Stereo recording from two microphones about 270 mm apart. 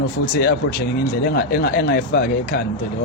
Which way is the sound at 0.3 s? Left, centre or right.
Left.